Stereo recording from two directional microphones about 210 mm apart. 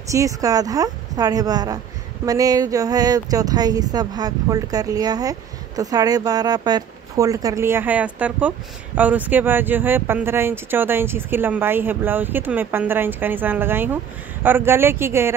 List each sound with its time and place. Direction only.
0.1 s speech: 15° right (ahead or behind)